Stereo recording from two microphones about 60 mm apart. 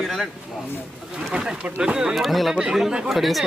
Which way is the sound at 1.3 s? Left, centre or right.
Centre.